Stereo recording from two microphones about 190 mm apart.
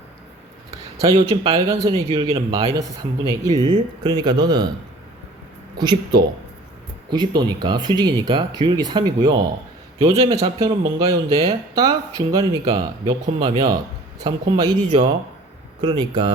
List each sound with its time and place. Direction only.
1.1 s speech: 30° right (ahead or behind)
5.7 s speech: 20° right (ahead or behind)
15.8 s speech: 25° right (ahead or behind)